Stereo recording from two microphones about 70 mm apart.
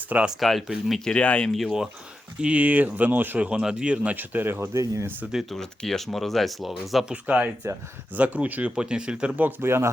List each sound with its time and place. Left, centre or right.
0.3 s speech: centre
1.5 s speech: centre
2.4 s speech: centre
4.7 s speech: right
5.3 s speech: centre
5.5 s speech: centre
7.0 s speech: centre
9.3 s speech: right